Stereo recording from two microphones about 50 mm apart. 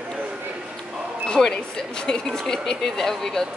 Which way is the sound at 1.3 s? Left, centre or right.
Centre.